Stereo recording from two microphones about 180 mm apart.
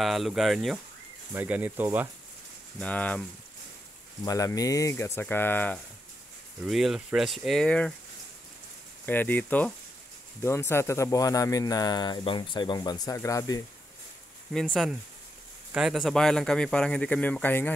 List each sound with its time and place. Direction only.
0.0 s speech: centre (ahead or behind)
2.8 s speech: 5° left (ahead or behind)
4.2 s speech: 20° left (ahead or behind)
6.6 s speech: 5° right (ahead or behind)
9.0 s speech: 10° left (ahead or behind)
14.5 s speech: centre (ahead or behind)